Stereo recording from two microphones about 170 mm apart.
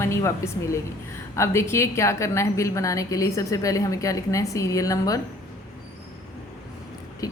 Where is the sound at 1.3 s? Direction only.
15° left (ahead or behind).